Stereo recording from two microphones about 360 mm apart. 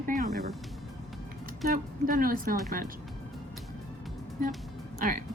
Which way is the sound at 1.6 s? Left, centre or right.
Right.